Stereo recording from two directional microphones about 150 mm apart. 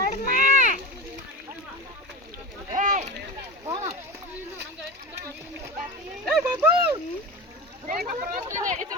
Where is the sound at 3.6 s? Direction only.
25° right (ahead or behind).